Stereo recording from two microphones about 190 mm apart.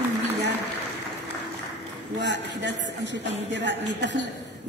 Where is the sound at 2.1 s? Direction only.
70° right (ahead or behind).